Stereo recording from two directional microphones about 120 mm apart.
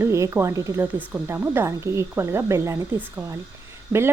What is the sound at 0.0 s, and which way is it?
Speech, 25° right (ahead or behind).